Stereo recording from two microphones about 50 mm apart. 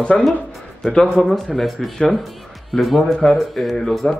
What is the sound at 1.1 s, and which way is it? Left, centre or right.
Speech, centre.